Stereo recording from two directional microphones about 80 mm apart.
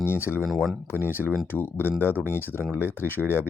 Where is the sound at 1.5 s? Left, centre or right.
Left.